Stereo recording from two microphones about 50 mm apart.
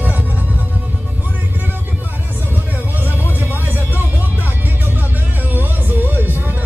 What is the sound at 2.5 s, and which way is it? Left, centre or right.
Music, right.